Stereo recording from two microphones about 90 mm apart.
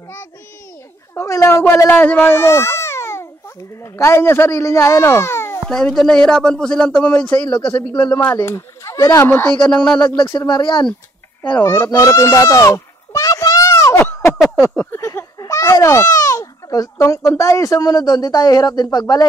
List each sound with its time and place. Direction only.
1.1 s speech: 35° left (ahead or behind)
1.9 s a child's voice: 20° left (ahead or behind)
5.7 s a child's voice: 5° left (ahead or behind); by 9.3 s 35° left (ahead or behind)
9.3 s a child's voice: 20° left (ahead or behind)
10.1 s speech: 60° left (ahead or behind)
11.6 s a sound: 30° left (ahead or behind)
15.3 s a child's voice: 35° left (ahead or behind)